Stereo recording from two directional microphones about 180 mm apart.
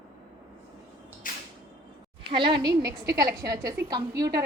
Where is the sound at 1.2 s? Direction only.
50° left (ahead or behind).